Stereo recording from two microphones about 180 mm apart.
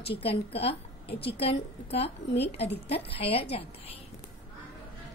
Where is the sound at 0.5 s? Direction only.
30° left (ahead or behind).